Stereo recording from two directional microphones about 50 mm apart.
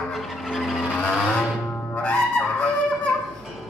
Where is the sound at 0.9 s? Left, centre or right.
Left.